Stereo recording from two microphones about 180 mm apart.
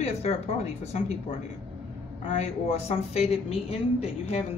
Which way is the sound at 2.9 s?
40° left (ahead or behind).